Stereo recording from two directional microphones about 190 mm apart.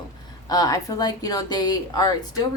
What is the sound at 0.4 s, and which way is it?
Speech, 20° left (ahead or behind).